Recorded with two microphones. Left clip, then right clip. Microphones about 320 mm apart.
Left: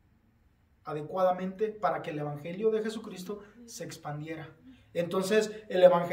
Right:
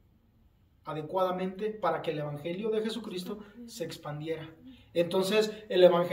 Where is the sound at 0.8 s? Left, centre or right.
Centre.